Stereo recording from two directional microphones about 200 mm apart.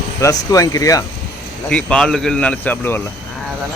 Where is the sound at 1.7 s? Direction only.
5° left (ahead or behind).